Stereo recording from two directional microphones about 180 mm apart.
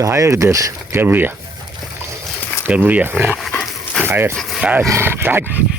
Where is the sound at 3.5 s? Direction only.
10° left (ahead or behind).